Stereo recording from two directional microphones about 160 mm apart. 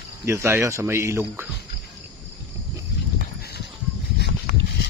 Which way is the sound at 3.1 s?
80° left.